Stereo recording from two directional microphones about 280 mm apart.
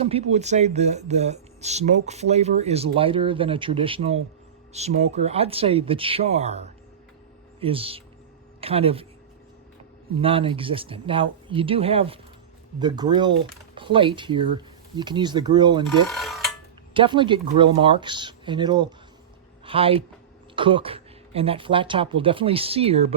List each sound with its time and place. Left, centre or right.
0.0 s speech: right
10.2 s speech: centre
16.0 s a sound: centre
16.9 s speech: centre